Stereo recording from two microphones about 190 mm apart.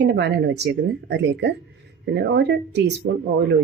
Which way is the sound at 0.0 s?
60° right (ahead or behind).